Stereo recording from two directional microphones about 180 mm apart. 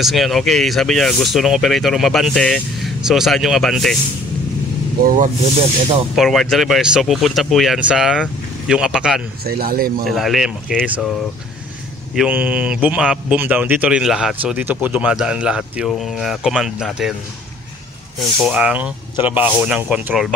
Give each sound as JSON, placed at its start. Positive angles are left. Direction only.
{"t": 0.0, "sound": "speech", "side_deg": 0}
{"t": 6.1, "sound": "speech", "side_deg": 0}
{"t": 9.4, "sound": "speech", "side_deg": -55}
{"t": 10.0, "sound": "speech", "side_deg": 0}
{"t": 12.2, "sound": "speech", "side_deg": -10}
{"t": 18.4, "sound": "speech", "side_deg": -5}